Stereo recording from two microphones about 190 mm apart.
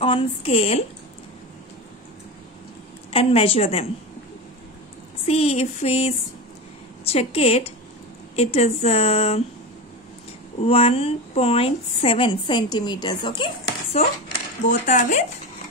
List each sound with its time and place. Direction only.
0.0 s speech: 30° left (ahead or behind)
3.1 s speech: 30° left (ahead or behind)
5.2 s speech: 30° left (ahead or behind)
10.6 s a woman's voice: 30° left (ahead or behind)
13.9 s speech: 35° left (ahead or behind)